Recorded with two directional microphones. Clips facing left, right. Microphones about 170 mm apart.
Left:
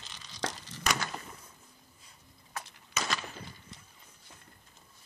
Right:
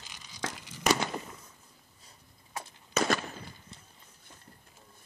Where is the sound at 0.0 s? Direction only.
10° right (ahead or behind).